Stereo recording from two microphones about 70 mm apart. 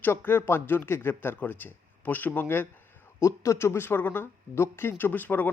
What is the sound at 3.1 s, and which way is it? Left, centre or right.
Speech, left.